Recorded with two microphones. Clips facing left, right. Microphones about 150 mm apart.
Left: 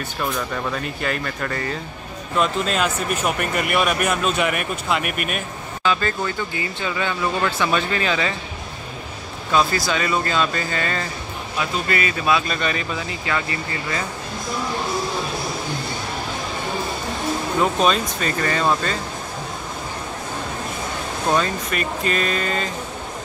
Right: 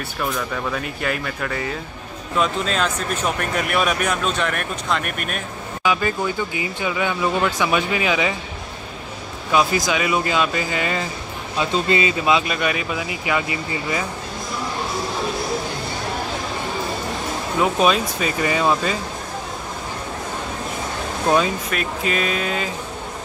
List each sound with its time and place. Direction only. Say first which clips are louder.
0.2 s speech: even; centre (ahead or behind)
5.9 s speech: right 1 dB; 10° right (ahead or behind)
9.5 s speech: right 1 dB; 15° right (ahead or behind)
11.5 s speech: right 4 dB; 25° right (ahead or behind)
12.4 s speech: right 1 dB; 10° right (ahead or behind)
17.6 s speech: right 2 dB; 5° right (ahead or behind)
21.3 s speech: right 2 dB; 5° right (ahead or behind)